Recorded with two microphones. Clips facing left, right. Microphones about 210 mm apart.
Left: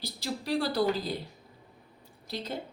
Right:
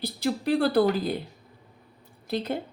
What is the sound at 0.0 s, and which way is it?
A woman's voice, 55° right (ahead or behind).